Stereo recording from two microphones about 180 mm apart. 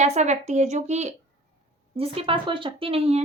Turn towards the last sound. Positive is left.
turn(degrees=-35)  # may be behind; listen again after turning